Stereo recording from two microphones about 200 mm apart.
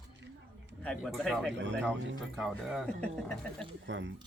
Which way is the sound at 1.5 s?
65° right (ahead or behind).